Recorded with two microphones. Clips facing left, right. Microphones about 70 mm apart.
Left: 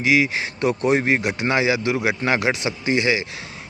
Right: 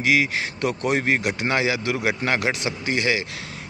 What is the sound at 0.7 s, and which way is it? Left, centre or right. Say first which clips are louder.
Speech: left 4 dB; left.